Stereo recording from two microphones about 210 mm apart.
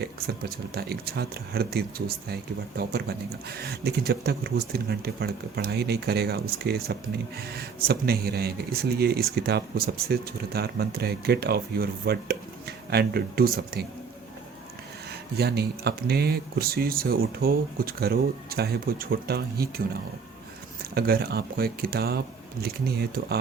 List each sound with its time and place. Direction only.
0.0 s speech: 50° right (ahead or behind)
15.4 s speech: 50° right (ahead or behind)
20.9 s speech: 50° right (ahead or behind)